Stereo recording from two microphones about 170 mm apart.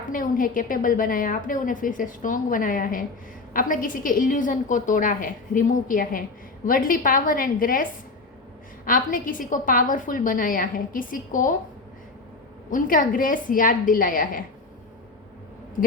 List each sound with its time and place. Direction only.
0.1 s a woman's voice: 55° left (ahead or behind)
12.7 s a woman's voice: 55° left (ahead or behind)